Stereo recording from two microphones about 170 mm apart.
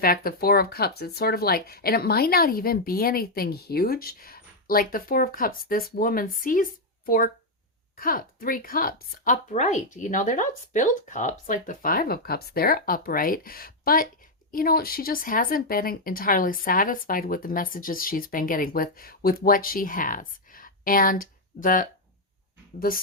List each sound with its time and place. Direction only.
0.0 s speech: 60° left (ahead or behind)